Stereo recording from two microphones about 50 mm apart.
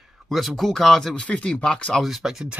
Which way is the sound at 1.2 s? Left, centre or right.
Left.